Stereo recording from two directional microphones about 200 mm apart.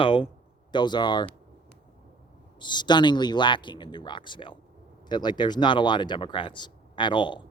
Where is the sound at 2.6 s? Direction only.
20° left (ahead or behind).